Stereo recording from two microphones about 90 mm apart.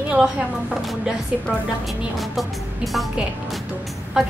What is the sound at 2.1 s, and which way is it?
Speech, centre (ahead or behind).